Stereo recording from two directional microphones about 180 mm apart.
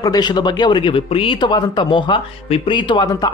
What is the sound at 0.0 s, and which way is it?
Speech, 20° left (ahead or behind).